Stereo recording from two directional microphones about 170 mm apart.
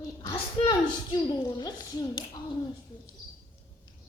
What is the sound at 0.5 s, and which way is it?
A woman's voice, 25° left (ahead or behind).